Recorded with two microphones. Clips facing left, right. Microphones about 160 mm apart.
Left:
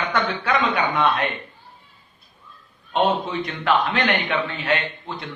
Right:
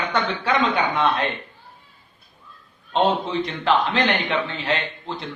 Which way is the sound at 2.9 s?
25° right (ahead or behind).